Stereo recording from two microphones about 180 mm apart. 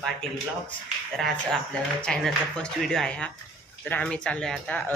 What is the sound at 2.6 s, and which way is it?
Speech, 5° left (ahead or behind).